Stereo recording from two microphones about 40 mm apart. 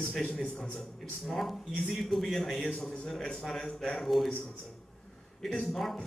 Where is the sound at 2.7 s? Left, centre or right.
Centre.